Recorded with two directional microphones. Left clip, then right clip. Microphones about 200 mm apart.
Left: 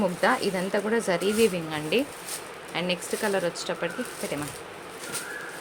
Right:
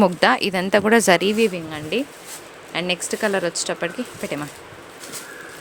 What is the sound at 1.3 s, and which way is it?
Speech, 25° right (ahead or behind).